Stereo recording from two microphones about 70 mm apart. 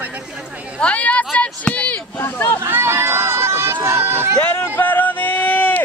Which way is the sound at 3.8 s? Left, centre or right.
Right.